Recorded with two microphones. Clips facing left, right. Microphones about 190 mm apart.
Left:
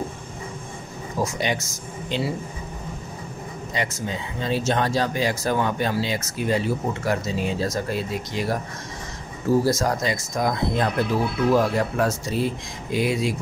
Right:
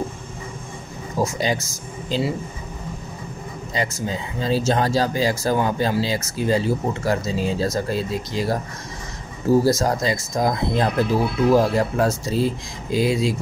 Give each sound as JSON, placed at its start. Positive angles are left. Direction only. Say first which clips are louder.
{"t": 1.2, "sound": "speech", "louder": "right 3 dB", "side_deg": -35}
{"t": 3.7, "sound": "speech", "louder": "right 3 dB", "side_deg": -35}
{"t": 9.7, "sound": "speech", "louder": "right 3 dB", "side_deg": -30}